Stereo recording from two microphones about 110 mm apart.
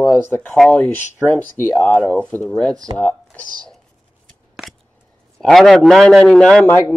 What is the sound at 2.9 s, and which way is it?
Speech, 45° right (ahead or behind).